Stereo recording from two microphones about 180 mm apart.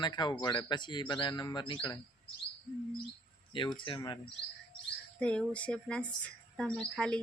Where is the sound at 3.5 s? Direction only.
25° left (ahead or behind).